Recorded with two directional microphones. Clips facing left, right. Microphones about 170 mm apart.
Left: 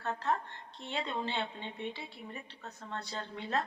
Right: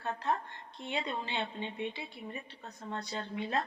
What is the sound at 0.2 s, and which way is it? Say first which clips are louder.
A woman's voice: even; 15° right (ahead or behind).